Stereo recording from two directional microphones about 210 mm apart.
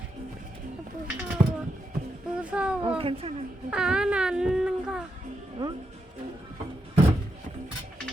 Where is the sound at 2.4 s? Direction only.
5° right (ahead or behind).